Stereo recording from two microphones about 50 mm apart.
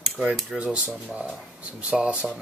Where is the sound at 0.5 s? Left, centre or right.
Right.